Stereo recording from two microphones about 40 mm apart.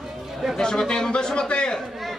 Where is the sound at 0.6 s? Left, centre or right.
Centre.